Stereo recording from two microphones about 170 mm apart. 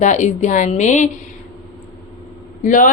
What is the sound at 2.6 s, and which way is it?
Speech, 50° left (ahead or behind).